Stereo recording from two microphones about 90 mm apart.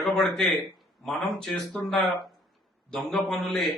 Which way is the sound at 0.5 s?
40° left (ahead or behind).